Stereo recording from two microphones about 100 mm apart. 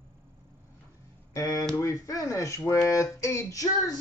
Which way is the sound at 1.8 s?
35° left (ahead or behind).